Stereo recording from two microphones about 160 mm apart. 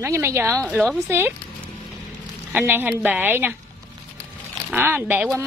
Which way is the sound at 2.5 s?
10° right (ahead or behind).